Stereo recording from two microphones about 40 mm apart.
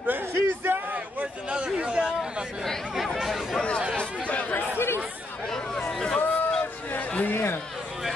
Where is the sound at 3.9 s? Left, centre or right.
Left.